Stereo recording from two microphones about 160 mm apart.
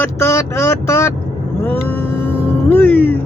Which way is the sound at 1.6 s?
15° left (ahead or behind).